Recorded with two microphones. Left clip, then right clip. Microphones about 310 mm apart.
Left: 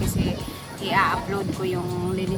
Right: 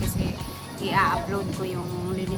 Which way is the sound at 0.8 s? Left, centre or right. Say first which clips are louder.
Left 1 dB; centre.